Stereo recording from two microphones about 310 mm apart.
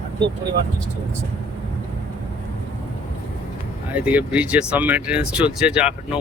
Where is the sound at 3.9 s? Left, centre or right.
Centre.